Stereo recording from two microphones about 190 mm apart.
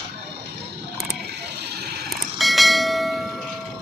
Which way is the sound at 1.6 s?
60° right (ahead or behind).